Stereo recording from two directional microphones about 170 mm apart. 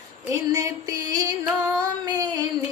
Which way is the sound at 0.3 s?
20° right (ahead or behind).